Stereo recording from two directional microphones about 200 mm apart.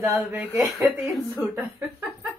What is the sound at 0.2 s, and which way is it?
Speech, 10° right (ahead or behind).